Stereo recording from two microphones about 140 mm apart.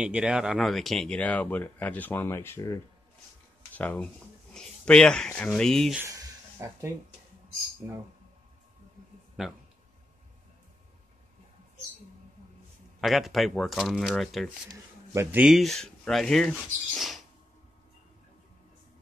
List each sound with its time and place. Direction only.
0.0 s speech: 5° right (ahead or behind)
6.0 s a sound: 20° right (ahead or behind)
7.8 s speech: 15° right (ahead or behind)
9.4 s speech: 5° right (ahead or behind)
13.0 s speech: centre (ahead or behind)